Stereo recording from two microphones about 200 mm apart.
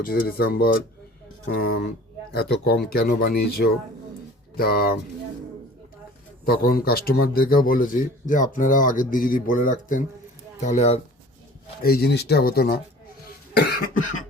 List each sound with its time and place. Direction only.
0.0 s speech: 50° left (ahead or behind)
6.4 s speech: 50° left (ahead or behind)
11.8 s speech: 50° left (ahead or behind)
13.2 s cough: 55° left (ahead or behind)